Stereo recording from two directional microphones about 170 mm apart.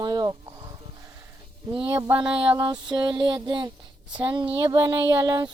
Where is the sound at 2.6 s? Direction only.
25° right (ahead or behind).